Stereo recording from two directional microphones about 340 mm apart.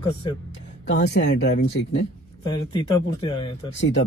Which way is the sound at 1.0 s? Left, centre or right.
Left.